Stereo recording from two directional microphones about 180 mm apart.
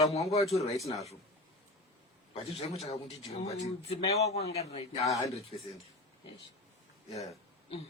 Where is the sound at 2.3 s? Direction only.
35° left (ahead or behind).